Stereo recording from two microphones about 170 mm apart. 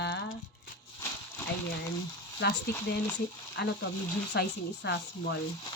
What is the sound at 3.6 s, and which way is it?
Speech, 75° left (ahead or behind).